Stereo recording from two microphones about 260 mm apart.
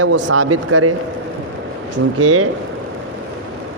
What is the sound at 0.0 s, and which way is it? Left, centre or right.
Speech, right.